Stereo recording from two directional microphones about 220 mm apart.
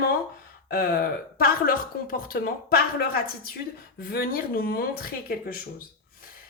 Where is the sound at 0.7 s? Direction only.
45° left (ahead or behind).